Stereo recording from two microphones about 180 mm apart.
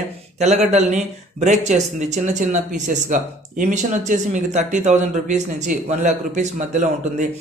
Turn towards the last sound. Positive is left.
turn(degrees=-40)  # may be behind; listen again after turning